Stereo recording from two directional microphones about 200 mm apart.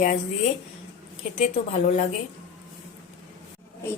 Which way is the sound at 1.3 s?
35° left (ahead or behind).